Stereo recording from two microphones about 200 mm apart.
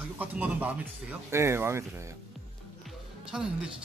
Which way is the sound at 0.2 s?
10° right (ahead or behind).